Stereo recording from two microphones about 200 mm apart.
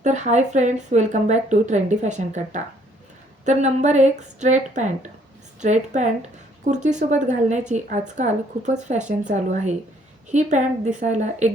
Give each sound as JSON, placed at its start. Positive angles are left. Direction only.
{"t": 0.0, "sound": "a woman's voice", "side_deg": -35}